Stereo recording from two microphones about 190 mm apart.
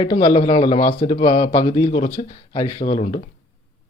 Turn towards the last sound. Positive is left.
turn(degrees=30)  # may be behind; listen again after turning